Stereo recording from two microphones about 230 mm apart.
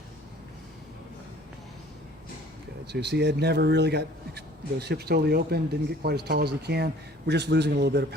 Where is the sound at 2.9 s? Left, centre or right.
Right.